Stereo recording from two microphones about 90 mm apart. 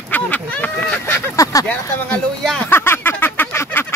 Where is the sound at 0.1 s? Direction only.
20° left (ahead or behind); by 1.7 s 40° left (ahead or behind).